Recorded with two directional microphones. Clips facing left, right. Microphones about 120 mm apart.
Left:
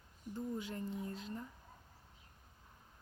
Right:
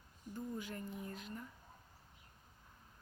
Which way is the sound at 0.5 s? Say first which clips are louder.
Left 3 dB; 25° left (ahead or behind).